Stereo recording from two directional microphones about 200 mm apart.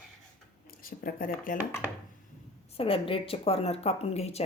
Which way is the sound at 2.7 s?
30° left (ahead or behind).